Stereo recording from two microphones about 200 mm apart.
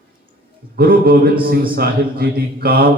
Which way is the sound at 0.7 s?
45° right (ahead or behind).